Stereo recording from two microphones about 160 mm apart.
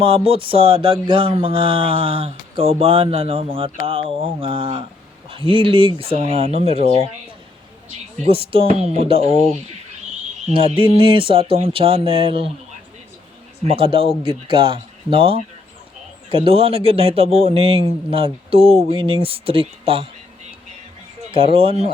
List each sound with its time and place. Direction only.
0.0 s mantra: 35° right (ahead or behind)
7.9 s mantra: 40° right (ahead or behind)
11.1 s mantra: 35° right (ahead or behind)
13.7 s mantra: 35° right (ahead or behind)
21.3 s mantra: 35° right (ahead or behind)